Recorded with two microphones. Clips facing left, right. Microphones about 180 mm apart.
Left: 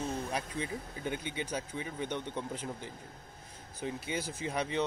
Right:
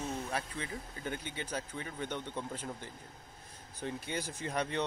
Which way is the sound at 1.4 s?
10° left (ahead or behind).